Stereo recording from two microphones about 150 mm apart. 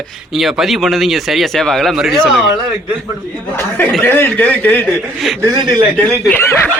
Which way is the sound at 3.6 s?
15° left (ahead or behind).